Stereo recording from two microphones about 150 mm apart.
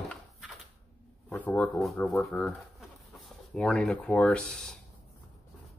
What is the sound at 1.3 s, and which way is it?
Speech, 5° left (ahead or behind).